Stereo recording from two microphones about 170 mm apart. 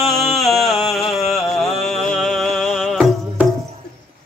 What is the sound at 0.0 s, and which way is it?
Music, centre (ahead or behind).